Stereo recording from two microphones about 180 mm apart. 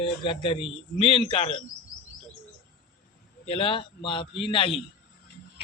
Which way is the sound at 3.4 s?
30° left (ahead or behind).